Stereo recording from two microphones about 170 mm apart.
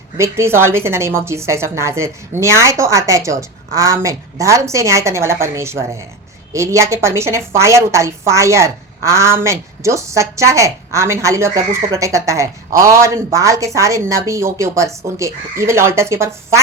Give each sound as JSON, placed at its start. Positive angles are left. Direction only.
{"t": 0.2, "sound": "a woman's voice", "side_deg": -15}